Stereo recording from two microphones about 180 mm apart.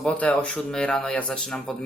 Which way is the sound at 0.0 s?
5° left (ahead or behind).